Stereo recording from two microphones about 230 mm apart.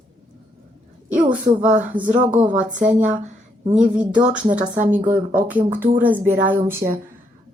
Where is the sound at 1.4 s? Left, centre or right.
Right.